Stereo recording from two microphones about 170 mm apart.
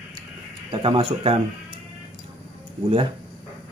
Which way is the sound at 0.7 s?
30° right (ahead or behind).